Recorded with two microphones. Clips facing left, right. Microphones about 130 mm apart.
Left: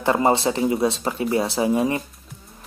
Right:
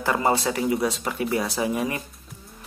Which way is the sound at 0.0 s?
25° left (ahead or behind).